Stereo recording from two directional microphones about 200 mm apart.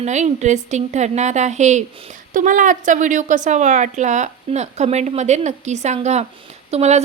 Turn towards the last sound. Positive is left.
turn(degrees=-35)  # may be behind; listen again after turning